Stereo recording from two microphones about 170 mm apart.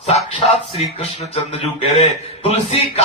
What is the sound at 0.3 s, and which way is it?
Music, 35° left (ahead or behind).